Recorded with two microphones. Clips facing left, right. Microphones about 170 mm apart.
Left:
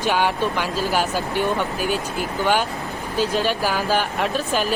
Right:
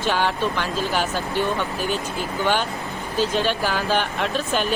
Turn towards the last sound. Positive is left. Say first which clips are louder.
# left 1 dB
turn(degrees=5)  # may be behind; listen again after turning